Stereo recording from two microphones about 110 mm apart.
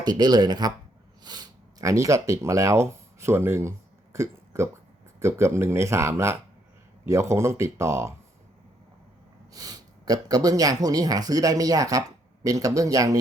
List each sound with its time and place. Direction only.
0.0 s speech: 40° right (ahead or behind)
9.5 s speech: 35° right (ahead or behind)